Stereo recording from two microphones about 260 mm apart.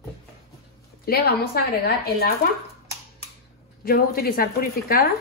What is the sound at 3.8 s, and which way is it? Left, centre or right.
A woman's voice, left.